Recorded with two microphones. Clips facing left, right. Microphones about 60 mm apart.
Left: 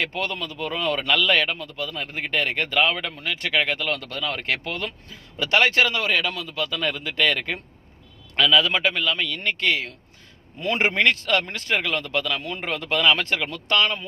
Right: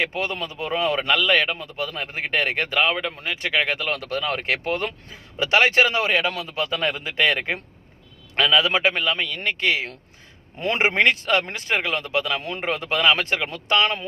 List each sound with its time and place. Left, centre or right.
0.0 s speech: centre
1.5 s a man's voice: right
2.7 s speech: centre
3.1 s a man's voice: right
3.4 s a man's voice: centre; by 9.2 s right
9.2 s speech: centre
11.0 s a man's voice: centre